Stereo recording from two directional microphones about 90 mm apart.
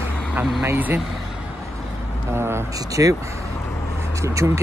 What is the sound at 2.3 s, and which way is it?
Speech, 30° right (ahead or behind).